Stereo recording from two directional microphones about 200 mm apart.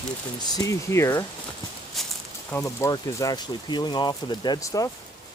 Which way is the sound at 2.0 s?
Centre (ahead or behind).